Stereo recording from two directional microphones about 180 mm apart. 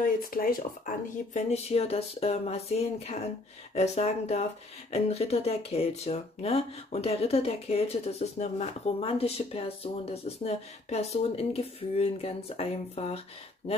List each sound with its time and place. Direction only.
0.0 s speech: 50° left (ahead or behind); by 13.2 s 35° left (ahead or behind)